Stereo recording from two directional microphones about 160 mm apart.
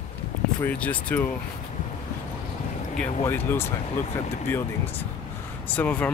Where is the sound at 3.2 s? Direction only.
15° left (ahead or behind).